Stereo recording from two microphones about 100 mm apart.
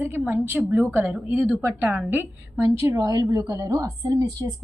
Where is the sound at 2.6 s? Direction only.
30° right (ahead or behind).